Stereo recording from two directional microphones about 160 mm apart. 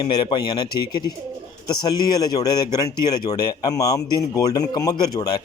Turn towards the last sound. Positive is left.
turn(degrees=25)  # may be behind; listen again after turning